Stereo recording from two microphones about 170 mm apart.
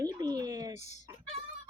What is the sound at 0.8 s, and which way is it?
Fowl, 40° left (ahead or behind).